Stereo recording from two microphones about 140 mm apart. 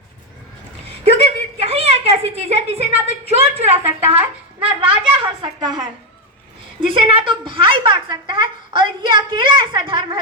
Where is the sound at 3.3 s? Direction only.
50° right (ahead or behind).